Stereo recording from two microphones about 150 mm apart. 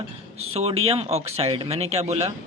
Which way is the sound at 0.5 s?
40° right (ahead or behind).